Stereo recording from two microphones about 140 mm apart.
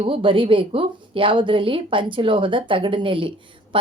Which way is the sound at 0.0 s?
40° right (ahead or behind).